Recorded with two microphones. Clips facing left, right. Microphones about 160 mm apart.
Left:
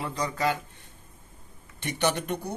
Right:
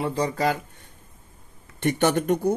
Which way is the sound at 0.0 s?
30° right (ahead or behind).